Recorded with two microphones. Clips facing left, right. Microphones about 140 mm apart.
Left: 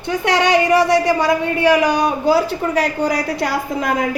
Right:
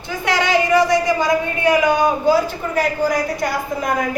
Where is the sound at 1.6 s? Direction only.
70° left (ahead or behind).